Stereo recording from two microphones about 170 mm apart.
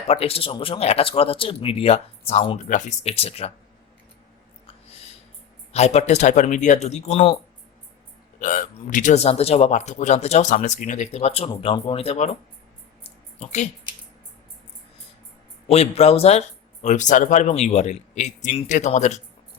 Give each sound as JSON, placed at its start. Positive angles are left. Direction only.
{"t": 0.1, "sound": "speech", "side_deg": 35}
{"t": 2.6, "sound": "speech", "side_deg": 50}
{"t": 5.7, "sound": "speech", "side_deg": 40}
{"t": 8.4, "sound": "speech", "side_deg": 50}
{"t": 13.0, "sound": "a sound", "side_deg": 35}
{"t": 15.6, "sound": "speech", "side_deg": 40}